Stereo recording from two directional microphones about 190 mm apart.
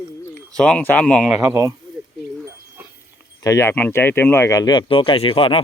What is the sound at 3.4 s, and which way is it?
Speech, 15° left (ahead or behind).